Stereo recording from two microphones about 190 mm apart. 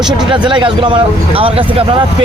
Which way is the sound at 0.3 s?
25° right (ahead or behind).